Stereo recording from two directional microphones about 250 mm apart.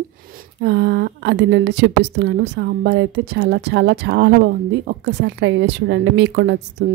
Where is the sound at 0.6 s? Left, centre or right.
Right.